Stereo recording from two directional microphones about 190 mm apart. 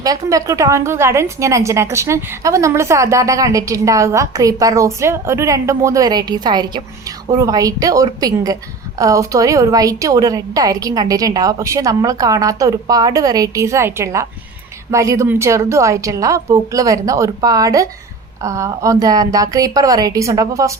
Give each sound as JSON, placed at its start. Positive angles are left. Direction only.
{"t": 0.0, "sound": "a woman's voice", "side_deg": -20}